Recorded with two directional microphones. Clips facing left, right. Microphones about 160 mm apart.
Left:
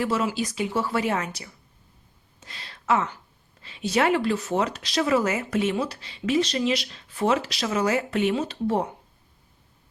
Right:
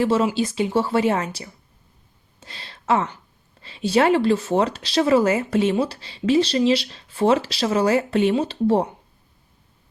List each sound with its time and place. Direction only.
0.0 s speech: 30° right (ahead or behind)
2.4 s a sound: 30° right (ahead or behind)
3.6 s speech: 30° right (ahead or behind)